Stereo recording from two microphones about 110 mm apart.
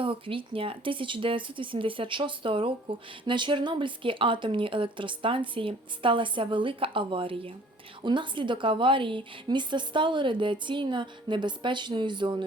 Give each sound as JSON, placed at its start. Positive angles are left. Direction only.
{"t": 0.0, "sound": "a woman's voice", "side_deg": -55}